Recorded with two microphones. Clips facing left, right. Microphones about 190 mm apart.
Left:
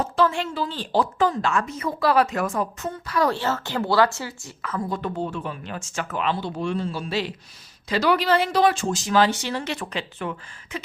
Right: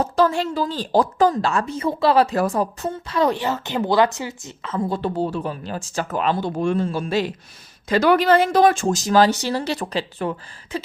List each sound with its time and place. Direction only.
0.0 s a woman's voice: 40° right (ahead or behind)